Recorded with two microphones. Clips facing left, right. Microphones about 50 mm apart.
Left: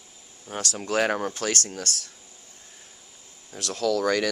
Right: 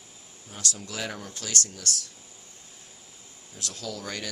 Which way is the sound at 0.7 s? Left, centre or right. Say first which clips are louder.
Left 11 dB; left.